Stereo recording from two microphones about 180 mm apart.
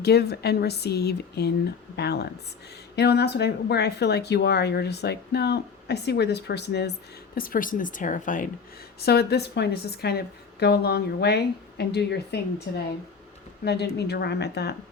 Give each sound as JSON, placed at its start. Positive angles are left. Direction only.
{"t": 0.0, "sound": "a woman's voice", "side_deg": 65}
{"t": 7.3, "sound": "speech", "side_deg": 50}
{"t": 9.0, "sound": "a woman's voice", "side_deg": 60}